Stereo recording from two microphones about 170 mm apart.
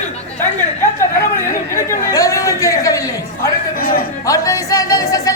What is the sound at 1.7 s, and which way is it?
Chatter, 20° left (ahead or behind).